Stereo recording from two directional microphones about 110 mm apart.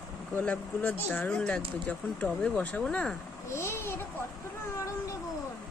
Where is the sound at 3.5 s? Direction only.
25° left (ahead or behind).